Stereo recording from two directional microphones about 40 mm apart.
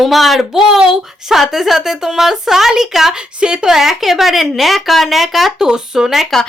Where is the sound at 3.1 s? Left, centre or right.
Right.